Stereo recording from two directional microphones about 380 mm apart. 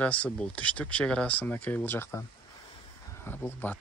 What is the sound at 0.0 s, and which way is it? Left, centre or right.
Speech, centre.